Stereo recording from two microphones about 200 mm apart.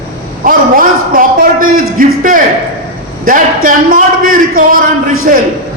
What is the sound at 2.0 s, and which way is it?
A man's voice, 40° right (ahead or behind).